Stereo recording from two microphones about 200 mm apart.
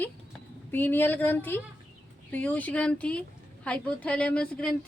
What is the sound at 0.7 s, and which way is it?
A woman's voice, 10° left (ahead or behind).